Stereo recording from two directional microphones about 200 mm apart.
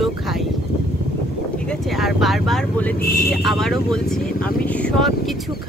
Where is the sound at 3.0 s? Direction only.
50° left (ahead or behind).